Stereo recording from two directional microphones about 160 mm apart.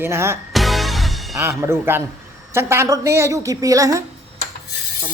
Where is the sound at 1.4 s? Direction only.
15° right (ahead or behind).